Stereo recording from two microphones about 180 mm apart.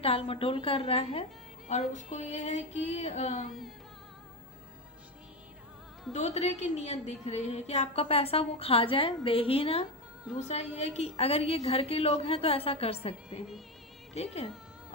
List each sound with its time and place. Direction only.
0.0 s a woman's voice: 30° left (ahead or behind)
6.1 s a woman's voice: 40° left (ahead or behind)